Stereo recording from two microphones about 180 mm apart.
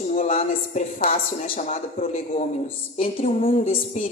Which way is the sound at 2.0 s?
40° left (ahead or behind).